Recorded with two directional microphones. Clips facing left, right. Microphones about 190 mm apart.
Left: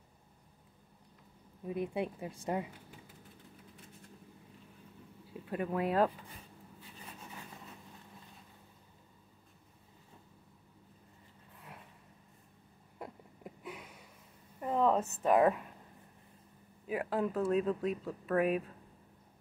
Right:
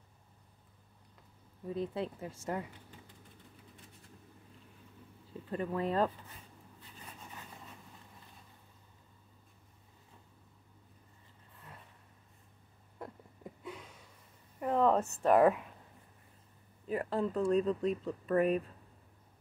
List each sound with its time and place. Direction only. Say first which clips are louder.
1.6 s speech: left 1 dB; 15° left (ahead or behind)
5.3 s speech: left 1 dB; 10° left (ahead or behind)
13.0 s a sound: even; 10° left (ahead or behind)
15.2 s speech: right 2 dB; centre (ahead or behind)
16.8 s speech: even; 5° left (ahead or behind)